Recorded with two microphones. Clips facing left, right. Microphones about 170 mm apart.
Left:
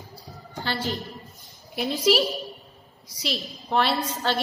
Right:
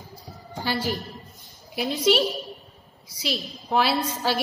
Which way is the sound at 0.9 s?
20° left (ahead or behind).